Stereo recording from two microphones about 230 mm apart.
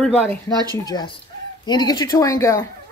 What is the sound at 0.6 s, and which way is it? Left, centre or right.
Speech, centre.